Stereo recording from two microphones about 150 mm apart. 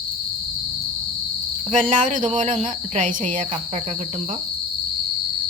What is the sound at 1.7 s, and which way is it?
Speech, 60° right (ahead or behind).